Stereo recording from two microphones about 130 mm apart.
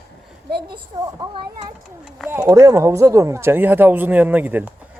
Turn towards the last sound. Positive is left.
turn(degrees=-15)  # may be behind; listen again after turning